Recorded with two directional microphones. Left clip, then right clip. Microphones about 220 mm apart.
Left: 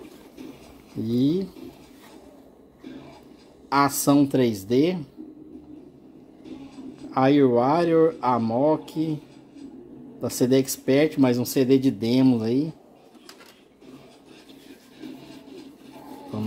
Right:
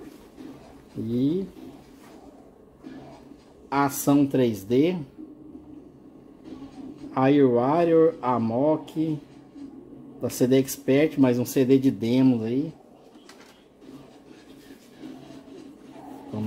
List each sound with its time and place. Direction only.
1.0 s speech: 20° left (ahead or behind)
3.6 s speech: 10° left (ahead or behind)
7.1 s speech: 10° left (ahead or behind)
10.2 s speech: 5° left (ahead or behind)